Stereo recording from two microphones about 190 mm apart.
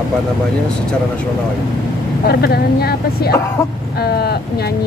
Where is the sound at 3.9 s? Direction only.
55° left (ahead or behind).